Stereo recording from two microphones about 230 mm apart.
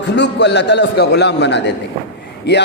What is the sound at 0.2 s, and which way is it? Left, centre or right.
A man's voice, left.